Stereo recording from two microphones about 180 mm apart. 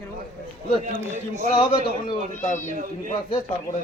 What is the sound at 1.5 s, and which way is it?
Speech, 30° left (ahead or behind).